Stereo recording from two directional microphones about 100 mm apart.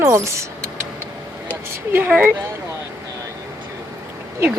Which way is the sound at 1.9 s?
15° right (ahead or behind).